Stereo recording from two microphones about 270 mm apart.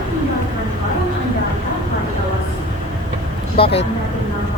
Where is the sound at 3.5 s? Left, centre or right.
Left.